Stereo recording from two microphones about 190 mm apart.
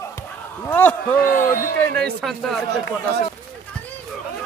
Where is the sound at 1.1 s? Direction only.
45° left (ahead or behind).